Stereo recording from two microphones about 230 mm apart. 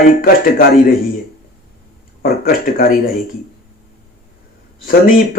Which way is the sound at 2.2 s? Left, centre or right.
Left.